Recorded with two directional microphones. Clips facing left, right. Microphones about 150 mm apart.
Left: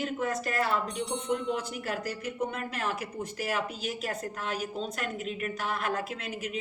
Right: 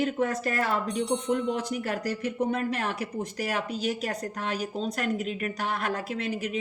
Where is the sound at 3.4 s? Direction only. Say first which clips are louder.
Right 2 dB; 40° right (ahead or behind).